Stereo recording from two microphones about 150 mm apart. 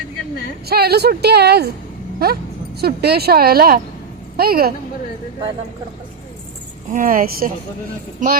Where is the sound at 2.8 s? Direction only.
90° right.